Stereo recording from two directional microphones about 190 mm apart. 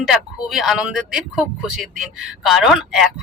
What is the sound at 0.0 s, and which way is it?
Speech, centre (ahead or behind).